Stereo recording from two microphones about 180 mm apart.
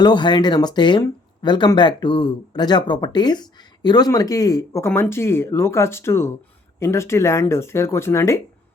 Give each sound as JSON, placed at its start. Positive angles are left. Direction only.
{"t": 0.0, "sound": "speech", "side_deg": 25}